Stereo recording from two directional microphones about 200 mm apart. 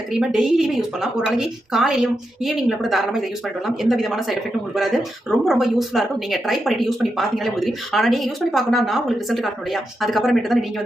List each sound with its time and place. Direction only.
0.1 s speech: 5° right (ahead or behind)